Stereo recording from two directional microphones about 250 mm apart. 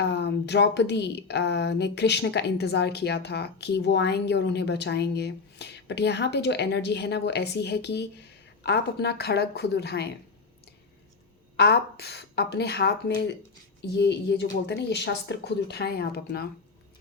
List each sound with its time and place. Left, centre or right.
0.0 s a woman's voice: left
11.5 s a woman's voice: left